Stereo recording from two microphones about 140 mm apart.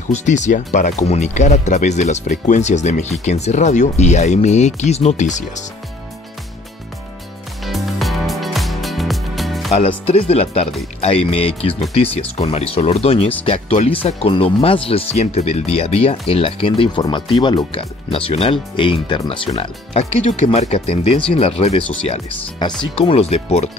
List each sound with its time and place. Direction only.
0.1 s speech: 55° left (ahead or behind)
7.6 s music: centre (ahead or behind)
9.7 s speech: 45° left (ahead or behind)
22.6 s speech: 30° left (ahead or behind)
22.9 s speech: 45° left (ahead or behind)